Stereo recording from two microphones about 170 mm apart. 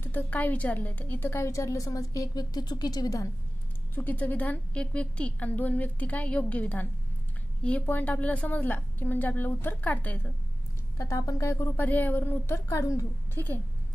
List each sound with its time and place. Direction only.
0.0 s a woman's voice: 10° left (ahead or behind)
3.9 s a woman's voice: 10° left (ahead or behind)